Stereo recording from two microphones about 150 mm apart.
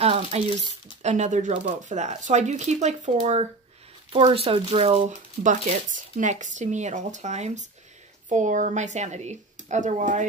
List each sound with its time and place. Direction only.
0.0 s speech: 45° right (ahead or behind)
4.1 s speech: 35° right (ahead or behind); by 10.2 s 55° right (ahead or behind)